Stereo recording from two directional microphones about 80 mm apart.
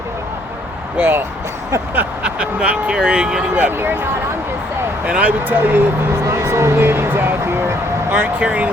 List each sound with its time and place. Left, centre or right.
0.9 s speech: right
2.0 s speech: centre
3.6 s speech: right
5.0 s speech: centre
6.2 s speech: right; by 8.7 s centre